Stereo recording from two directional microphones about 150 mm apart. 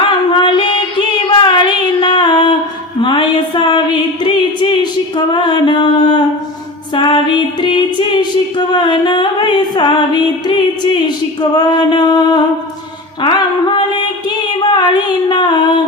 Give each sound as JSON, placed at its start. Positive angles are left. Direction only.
{"t": 0.0, "sound": "mantra", "side_deg": 35}
{"t": 1.3, "sound": "child singing", "side_deg": 30}
{"t": 3.0, "sound": "a sound", "side_deg": 35}
{"t": 6.9, "sound": "music", "side_deg": 30}
{"t": 11.5, "sound": "mantra", "side_deg": 30}
{"t": 13.2, "sound": "a sound", "side_deg": 30}